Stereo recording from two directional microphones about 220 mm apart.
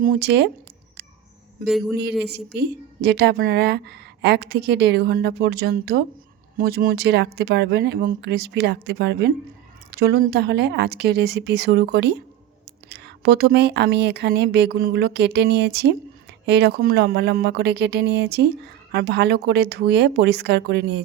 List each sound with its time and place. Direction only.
0.0 s speech: 45° right (ahead or behind)
2.5 s speech: 50° right (ahead or behind)